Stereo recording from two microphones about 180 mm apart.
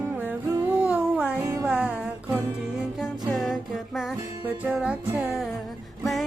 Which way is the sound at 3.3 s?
Centre (ahead or behind).